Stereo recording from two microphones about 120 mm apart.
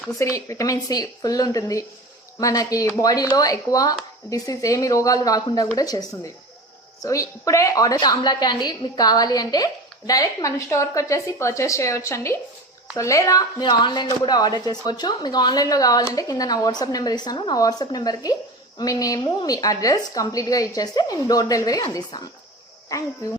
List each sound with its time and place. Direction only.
0.2 s a woman's voice: 25° left (ahead or behind)